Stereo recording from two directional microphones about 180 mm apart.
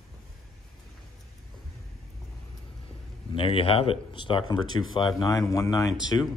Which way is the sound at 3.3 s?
30° left (ahead or behind).